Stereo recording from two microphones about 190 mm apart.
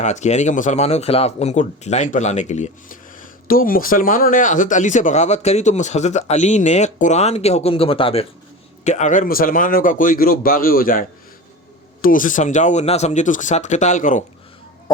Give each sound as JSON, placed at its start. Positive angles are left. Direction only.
{"t": 0.0, "sound": "a man's voice", "side_deg": 40}
{"t": 12.0, "sound": "speech", "side_deg": 45}